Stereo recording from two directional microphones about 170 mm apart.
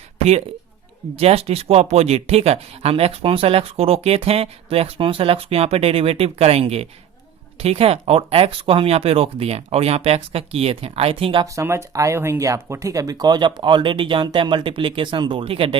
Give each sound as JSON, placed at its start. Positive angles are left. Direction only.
{"t": 1.1, "sound": "speech", "side_deg": -35}
{"t": 11.4, "sound": "speech", "side_deg": -15}